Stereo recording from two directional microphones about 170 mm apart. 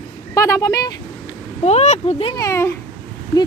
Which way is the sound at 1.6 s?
40° left (ahead or behind).